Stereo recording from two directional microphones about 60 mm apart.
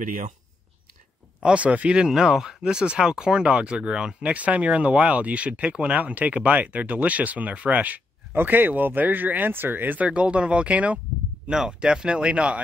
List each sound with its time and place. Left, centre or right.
1.4 s speech: right
2.0 s speech: centre; by 10.0 s right
10.0 s speech: centre
11.4 s speech: centre